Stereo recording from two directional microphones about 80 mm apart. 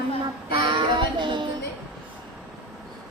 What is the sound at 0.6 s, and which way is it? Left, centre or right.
Child singing, right.